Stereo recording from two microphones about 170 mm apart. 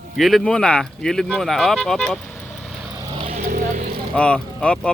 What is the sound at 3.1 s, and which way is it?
Vehicle, 35° right (ahead or behind).